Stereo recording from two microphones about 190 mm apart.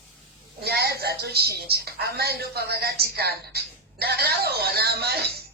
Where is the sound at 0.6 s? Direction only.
55° right (ahead or behind).